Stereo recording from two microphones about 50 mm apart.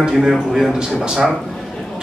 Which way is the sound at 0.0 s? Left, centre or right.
Centre.